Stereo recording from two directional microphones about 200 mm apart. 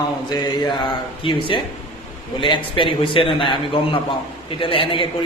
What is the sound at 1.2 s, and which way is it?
A man's voice, 25° left (ahead or behind).